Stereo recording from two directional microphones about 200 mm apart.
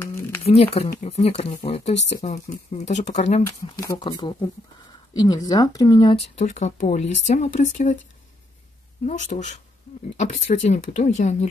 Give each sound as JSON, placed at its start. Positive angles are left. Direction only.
{"t": 0.5, "sound": "speech", "side_deg": 30}
{"t": 3.8, "sound": "speech", "side_deg": 20}
{"t": 9.0, "sound": "speech", "side_deg": 35}